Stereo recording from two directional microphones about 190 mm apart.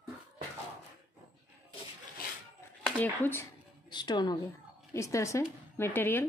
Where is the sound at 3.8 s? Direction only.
25° left (ahead or behind).